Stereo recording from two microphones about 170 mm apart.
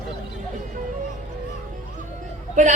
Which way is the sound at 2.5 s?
45° right (ahead or behind).